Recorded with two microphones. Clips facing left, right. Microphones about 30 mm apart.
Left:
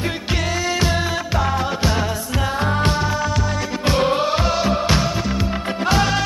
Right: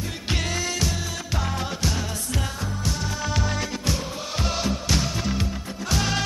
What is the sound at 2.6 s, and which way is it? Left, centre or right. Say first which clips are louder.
Music: left 10 dB; left.